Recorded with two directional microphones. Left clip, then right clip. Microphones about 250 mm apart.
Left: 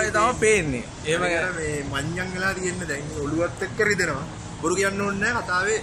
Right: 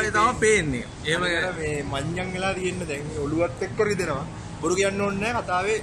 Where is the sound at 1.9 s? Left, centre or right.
Centre.